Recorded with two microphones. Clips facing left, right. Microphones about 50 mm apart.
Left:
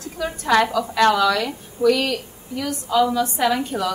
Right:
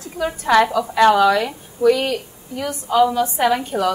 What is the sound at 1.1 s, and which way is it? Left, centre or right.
A woman's voice, right.